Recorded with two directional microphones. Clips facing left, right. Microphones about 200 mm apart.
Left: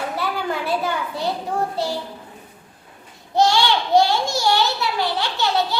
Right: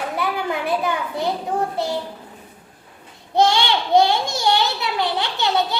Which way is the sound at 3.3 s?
20° right (ahead or behind).